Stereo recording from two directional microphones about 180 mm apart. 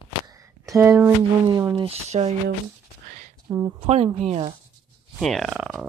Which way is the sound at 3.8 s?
35° right (ahead or behind).